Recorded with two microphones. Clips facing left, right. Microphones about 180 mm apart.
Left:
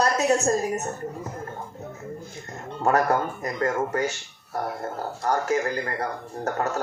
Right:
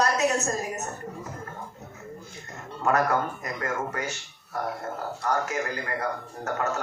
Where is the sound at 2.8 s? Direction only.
35° left (ahead or behind).